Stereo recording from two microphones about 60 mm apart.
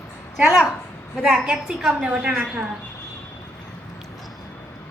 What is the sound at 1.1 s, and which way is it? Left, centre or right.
A woman's voice, centre.